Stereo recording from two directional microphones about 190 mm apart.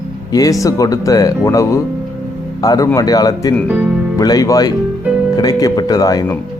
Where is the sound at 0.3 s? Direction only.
20° left (ahead or behind).